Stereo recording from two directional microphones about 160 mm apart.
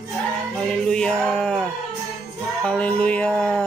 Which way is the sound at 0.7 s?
5° left (ahead or behind).